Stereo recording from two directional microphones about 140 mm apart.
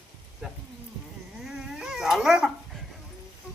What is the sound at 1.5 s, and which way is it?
Dog, 5° right (ahead or behind).